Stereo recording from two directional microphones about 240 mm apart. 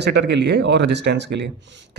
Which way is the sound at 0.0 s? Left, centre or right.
Right.